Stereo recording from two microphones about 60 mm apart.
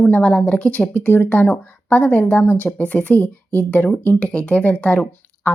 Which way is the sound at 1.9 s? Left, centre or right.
Left.